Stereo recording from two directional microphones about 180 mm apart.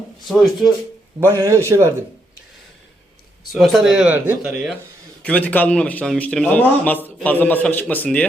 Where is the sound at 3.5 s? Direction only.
Centre (ahead or behind).